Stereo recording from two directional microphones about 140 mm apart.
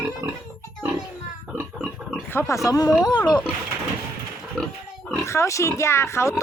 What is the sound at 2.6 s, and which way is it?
Speech, 25° left (ahead or behind).